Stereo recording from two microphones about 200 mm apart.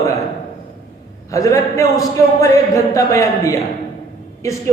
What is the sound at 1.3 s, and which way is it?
A man's voice, 15° left (ahead or behind).